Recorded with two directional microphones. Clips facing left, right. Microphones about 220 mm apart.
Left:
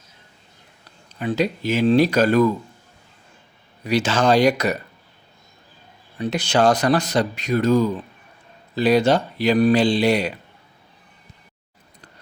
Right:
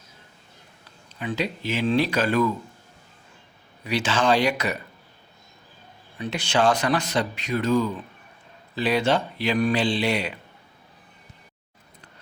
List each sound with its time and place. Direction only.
1.2 s speech: 40° left (ahead or behind)
3.8 s speech: 40° left (ahead or behind)
6.1 s speech: 40° left (ahead or behind)